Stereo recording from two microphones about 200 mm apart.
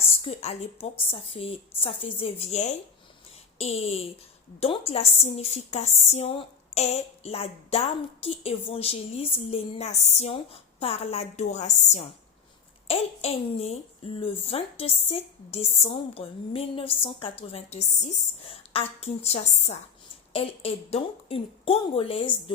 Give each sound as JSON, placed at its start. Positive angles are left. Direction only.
{"t": 0.0, "sound": "a woman's voice", "side_deg": 30}